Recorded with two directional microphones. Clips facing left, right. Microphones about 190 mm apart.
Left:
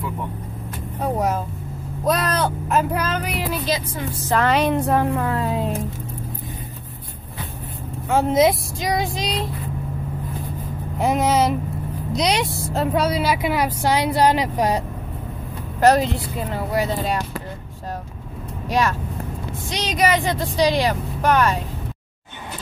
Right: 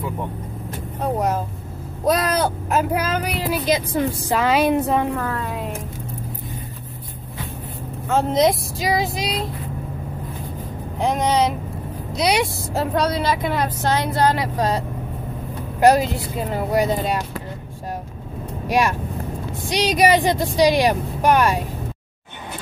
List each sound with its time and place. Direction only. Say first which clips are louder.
2.0 s speech: right 2 dB; 10° right (ahead or behind)
5.1 s a woman's voice: left 3 dB; 30° left (ahead or behind)
8.1 s speech: left 1 dB; 5° left (ahead or behind)
11.0 s speech: left 1 dB; 5° left (ahead or behind)
12.1 s speech: right 1 dB; 10° right (ahead or behind)
12.9 s a woman's voice: even; 5° left (ahead or behind)
15.8 s speech: right 1 dB; 5° right (ahead or behind)
18.7 s speech: right 1 dB; 15° right (ahead or behind)